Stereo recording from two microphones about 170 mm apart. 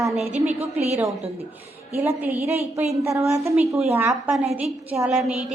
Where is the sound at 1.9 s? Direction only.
10° right (ahead or behind).